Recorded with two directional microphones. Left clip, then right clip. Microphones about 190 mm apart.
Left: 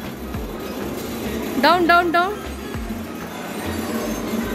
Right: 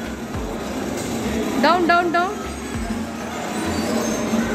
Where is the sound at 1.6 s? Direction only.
30° left (ahead or behind).